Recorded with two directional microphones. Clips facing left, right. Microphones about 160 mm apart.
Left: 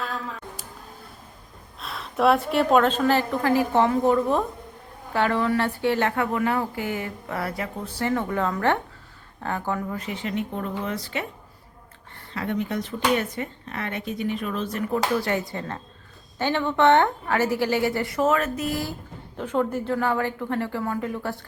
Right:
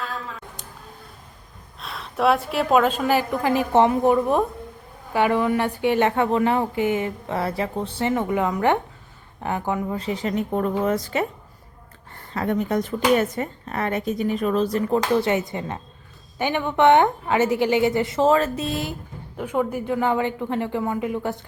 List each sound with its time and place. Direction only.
1.8 s a woman's voice: centre (ahead or behind); by 11.3 s 45° right (ahead or behind)
12.3 s a woman's voice: 45° right (ahead or behind); by 18.9 s 20° right (ahead or behind)
19.4 s a woman's voice: 10° right (ahead or behind)